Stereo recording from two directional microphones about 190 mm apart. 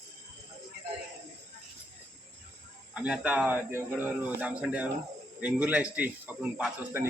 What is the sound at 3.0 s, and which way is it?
Speech, 5° right (ahead or behind).